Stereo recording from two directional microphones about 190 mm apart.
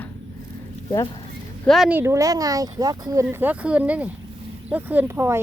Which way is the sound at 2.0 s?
15° right (ahead or behind).